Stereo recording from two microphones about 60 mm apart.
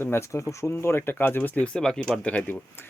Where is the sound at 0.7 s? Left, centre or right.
Left.